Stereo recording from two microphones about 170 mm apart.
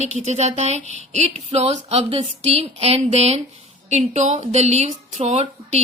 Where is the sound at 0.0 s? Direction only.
40° right (ahead or behind).